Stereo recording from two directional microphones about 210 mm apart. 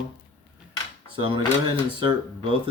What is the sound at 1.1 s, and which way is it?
Speech, 25° right (ahead or behind).